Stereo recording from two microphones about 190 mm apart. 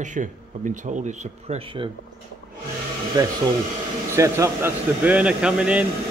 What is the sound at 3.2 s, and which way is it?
Speech, 20° right (ahead or behind).